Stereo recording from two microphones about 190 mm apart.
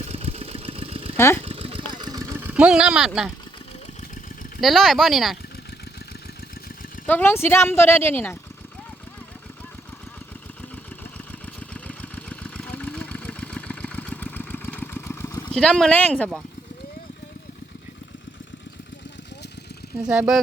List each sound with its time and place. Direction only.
0.0 s vehicle: 35° right (ahead or behind)
1.1 s speech: 15° left (ahead or behind)
1.4 s vehicle: 30° right (ahead or behind); by 3.3 s centre (ahead or behind)
4.6 s speech: centre (ahead or behind)
7.1 s speech: 10° left (ahead or behind)
11.7 s vehicle: 5° left (ahead or behind)
20.0 s speech: 5° right (ahead or behind)